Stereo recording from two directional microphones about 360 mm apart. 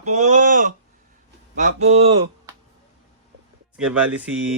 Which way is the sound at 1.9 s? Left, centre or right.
Centre.